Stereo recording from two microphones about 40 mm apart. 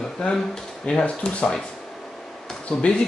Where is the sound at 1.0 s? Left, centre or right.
Left.